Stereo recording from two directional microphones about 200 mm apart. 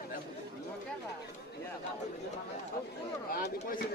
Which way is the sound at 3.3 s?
45° left (ahead or behind).